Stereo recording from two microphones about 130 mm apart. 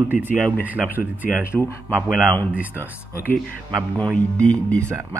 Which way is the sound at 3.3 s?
15° left (ahead or behind).